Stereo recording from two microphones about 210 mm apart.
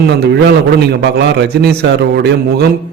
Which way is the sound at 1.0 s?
55° right (ahead or behind).